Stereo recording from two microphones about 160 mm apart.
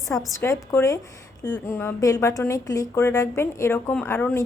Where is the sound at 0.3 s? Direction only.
20° left (ahead or behind).